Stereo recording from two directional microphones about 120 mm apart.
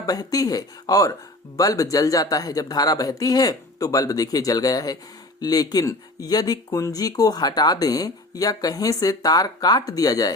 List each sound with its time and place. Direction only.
0.0 s speech: 30° left (ahead or behind)